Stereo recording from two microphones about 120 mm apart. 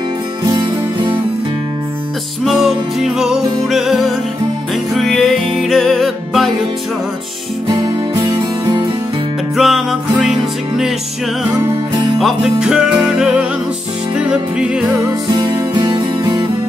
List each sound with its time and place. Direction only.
0.4 s music: 45° right (ahead or behind)
2.4 s music: 5° right (ahead or behind)
7.6 s music: 35° right (ahead or behind)
9.6 s music: centre (ahead or behind)
12.2 s music: centre (ahead or behind)
15.3 s music: 35° right (ahead or behind)